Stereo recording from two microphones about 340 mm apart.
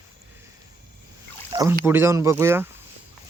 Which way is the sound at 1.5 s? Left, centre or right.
Centre.